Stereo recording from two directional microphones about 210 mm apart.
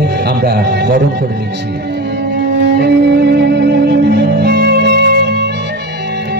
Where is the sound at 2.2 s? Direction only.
55° right (ahead or behind).